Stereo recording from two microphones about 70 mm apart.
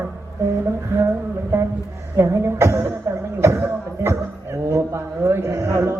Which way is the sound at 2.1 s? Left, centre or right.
Right.